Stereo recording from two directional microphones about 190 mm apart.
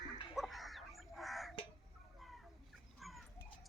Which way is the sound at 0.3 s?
Centre (ahead or behind).